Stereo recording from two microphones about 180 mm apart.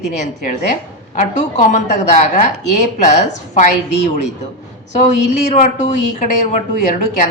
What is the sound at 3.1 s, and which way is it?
Speech, 40° left (ahead or behind).